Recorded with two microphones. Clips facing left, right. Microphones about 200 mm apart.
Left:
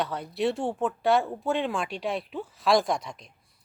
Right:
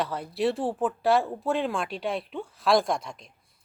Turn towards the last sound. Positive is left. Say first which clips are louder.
# even
turn(degrees=0)  # may be behind; listen again after turning